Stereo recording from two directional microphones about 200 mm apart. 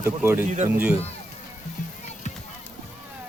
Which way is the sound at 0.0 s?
10° right (ahead or behind).